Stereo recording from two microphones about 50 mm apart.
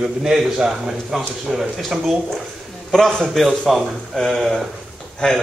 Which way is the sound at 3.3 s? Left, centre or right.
Centre.